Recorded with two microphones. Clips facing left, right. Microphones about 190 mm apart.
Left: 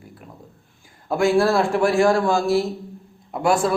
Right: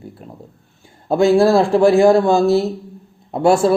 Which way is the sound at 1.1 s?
25° right (ahead or behind).